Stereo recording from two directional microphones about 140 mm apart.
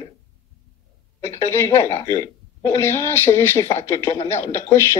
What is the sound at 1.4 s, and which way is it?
A man's voice, 20° left (ahead or behind).